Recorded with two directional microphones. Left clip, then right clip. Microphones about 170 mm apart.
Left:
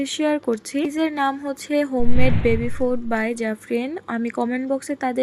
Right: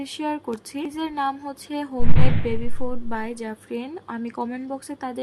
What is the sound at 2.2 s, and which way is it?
Speech, 10° right (ahead or behind).